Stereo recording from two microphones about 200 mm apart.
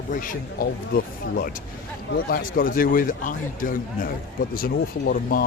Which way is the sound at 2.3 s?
45° left (ahead or behind).